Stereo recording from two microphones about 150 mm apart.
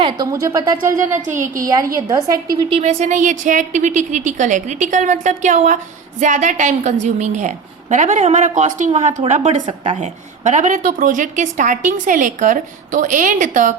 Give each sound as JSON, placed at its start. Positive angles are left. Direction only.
{"t": 0.3, "sound": "speech", "side_deg": -25}
{"t": 1.3, "sound": "a woman's voice", "side_deg": -60}
{"t": 1.6, "sound": "speech", "side_deg": -25}
{"t": 2.6, "sound": "a woman's voice", "side_deg": -40}